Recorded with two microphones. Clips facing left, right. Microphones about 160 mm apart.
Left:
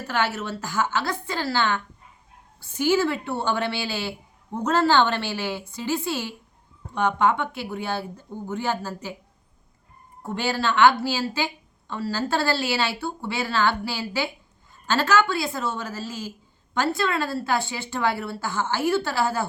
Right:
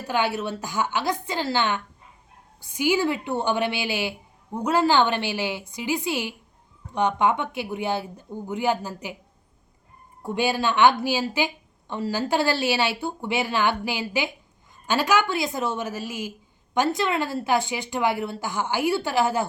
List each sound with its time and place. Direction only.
0.1 s a woman's voice: 15° right (ahead or behind)
10.2 s a woman's voice: 15° right (ahead or behind)